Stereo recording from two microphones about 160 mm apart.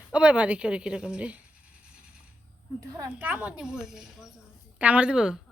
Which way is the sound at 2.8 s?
20° right (ahead or behind).